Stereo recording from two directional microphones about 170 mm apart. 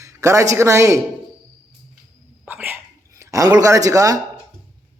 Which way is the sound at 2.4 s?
10° right (ahead or behind).